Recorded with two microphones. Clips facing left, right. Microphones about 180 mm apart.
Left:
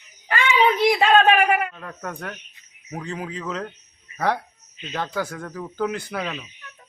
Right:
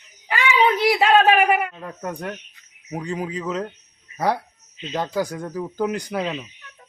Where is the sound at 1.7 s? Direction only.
20° right (ahead or behind).